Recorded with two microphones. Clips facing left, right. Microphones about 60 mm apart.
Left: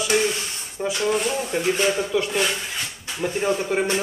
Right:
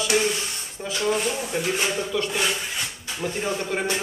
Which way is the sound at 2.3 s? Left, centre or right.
Centre.